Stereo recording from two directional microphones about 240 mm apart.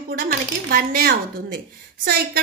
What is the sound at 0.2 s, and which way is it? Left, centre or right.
A woman's voice, right.